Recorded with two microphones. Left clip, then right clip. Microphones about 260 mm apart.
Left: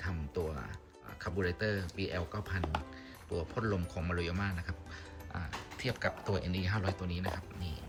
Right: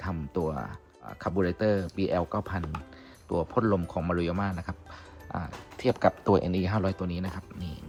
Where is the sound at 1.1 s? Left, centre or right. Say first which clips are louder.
Right 7 dB; centre.